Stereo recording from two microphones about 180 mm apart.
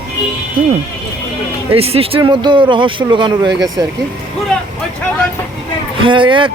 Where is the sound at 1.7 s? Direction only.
35° right (ahead or behind).